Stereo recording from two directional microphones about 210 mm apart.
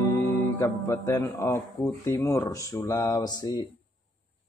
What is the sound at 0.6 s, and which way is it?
Speech, 15° left (ahead or behind).